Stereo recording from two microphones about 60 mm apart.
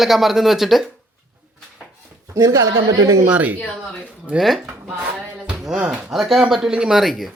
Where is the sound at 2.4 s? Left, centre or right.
Right.